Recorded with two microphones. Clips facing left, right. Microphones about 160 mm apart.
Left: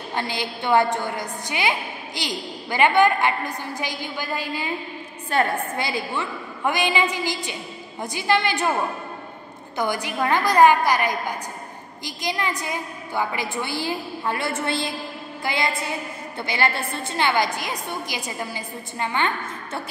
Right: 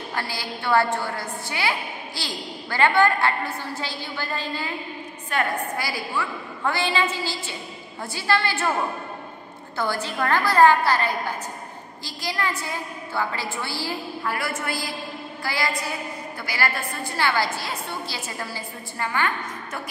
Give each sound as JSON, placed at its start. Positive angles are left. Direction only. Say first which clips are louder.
{"t": 0.1, "sound": "a woman's voice", "louder": "left 5 dB", "side_deg": 20}
{"t": 5.3, "sound": "a woman's voice", "louder": "left 3 dB", "side_deg": 25}
{"t": 9.8, "sound": "a woman's voice", "louder": "left 2 dB", "side_deg": 15}